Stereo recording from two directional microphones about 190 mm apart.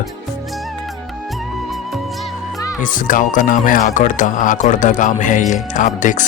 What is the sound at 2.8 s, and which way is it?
Speech, 45° left (ahead or behind).